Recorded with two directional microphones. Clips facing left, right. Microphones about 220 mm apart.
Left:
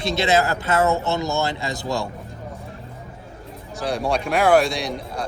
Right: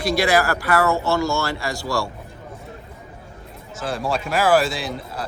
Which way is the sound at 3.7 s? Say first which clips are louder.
Left 2 dB; centre (ahead or behind).